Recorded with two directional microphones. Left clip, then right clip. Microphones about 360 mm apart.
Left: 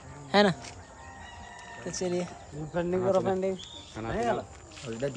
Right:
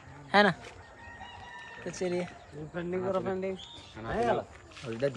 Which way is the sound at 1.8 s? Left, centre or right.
Centre.